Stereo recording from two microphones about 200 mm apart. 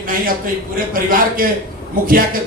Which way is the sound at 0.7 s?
45° right (ahead or behind).